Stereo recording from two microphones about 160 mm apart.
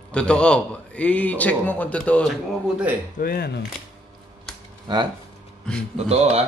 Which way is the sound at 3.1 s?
70° left (ahead or behind).